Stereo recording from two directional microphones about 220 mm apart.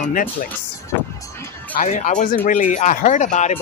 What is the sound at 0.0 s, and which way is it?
Speech, 40° left (ahead or behind).